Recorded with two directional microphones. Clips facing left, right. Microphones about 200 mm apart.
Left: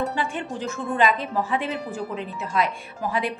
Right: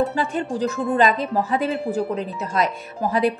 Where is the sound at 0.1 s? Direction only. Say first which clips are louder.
Right 5 dB; 40° right (ahead or behind).